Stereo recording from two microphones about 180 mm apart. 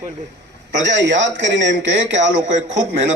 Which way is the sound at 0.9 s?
90° right.